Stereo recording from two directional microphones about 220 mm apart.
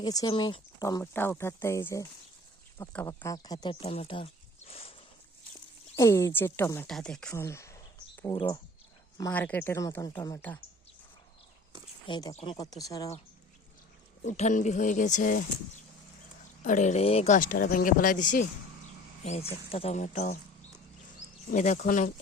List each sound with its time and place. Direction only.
0.0 s speech: 15° left (ahead or behind)
6.0 s speech: 15° left (ahead or behind)
12.0 s speech: 20° left (ahead or behind)
14.3 s speech: 35° left (ahead or behind)
16.6 s speech: 35° left (ahead or behind)
21.5 s speech: 30° left (ahead or behind)